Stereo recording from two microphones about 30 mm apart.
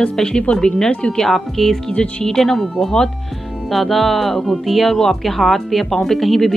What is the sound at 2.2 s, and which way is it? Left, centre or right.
Speech, centre.